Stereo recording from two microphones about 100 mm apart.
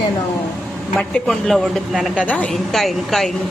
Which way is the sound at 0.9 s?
5° left (ahead or behind).